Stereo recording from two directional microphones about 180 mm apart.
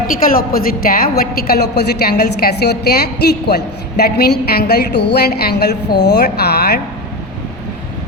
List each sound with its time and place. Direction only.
0.2 s a woman's voice: 55° left (ahead or behind)